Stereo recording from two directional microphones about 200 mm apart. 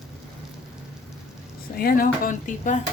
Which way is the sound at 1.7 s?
45° left (ahead or behind).